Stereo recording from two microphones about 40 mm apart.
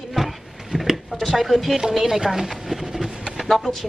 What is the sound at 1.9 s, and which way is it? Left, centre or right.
Speech, centre.